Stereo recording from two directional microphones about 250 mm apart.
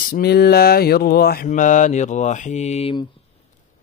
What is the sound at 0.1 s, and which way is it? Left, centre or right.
Mantra, left.